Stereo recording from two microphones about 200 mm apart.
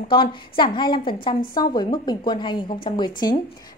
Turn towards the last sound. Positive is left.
turn(degrees=20)  # may be behind; listen again after turning